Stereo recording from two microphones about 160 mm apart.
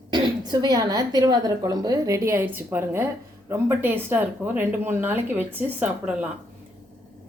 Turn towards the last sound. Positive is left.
turn(degrees=-10)  # may be behind; listen again after turning